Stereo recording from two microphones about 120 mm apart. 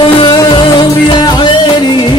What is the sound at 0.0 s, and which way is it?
Music, 40° left (ahead or behind).